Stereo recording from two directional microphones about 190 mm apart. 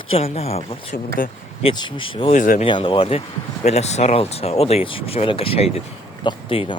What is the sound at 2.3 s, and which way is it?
Speech, 45° left (ahead or behind).